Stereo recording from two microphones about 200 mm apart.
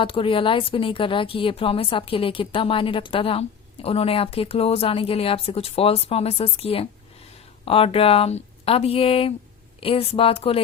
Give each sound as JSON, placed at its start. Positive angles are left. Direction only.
{"t": 0.0, "sound": "a woman's voice", "side_deg": 25}